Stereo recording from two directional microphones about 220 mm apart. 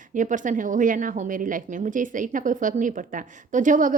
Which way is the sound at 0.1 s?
35° right (ahead or behind).